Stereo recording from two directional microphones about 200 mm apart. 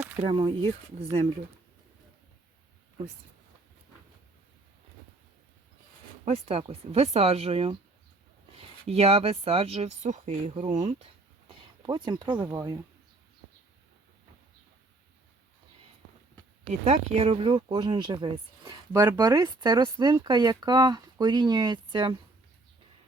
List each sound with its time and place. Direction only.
0.2 s speech: 25° right (ahead or behind)
6.2 s speech: 30° right (ahead or behind)
16.8 s speech: 35° right (ahead or behind)